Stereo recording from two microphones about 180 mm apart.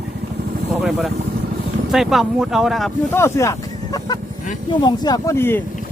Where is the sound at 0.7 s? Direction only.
Centre (ahead or behind).